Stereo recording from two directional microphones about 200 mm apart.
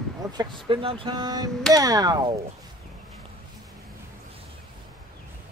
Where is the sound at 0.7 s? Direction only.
25° right (ahead or behind).